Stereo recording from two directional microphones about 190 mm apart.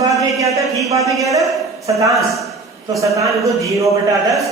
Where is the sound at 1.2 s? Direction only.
15° right (ahead or behind).